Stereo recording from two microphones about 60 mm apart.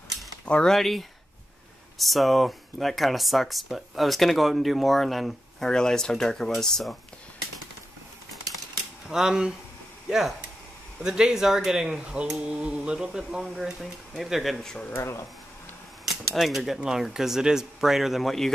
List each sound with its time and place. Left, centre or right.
0.7 s speech: centre
9.1 s speech: centre
15.0 s speech: left
16.3 s speech: centre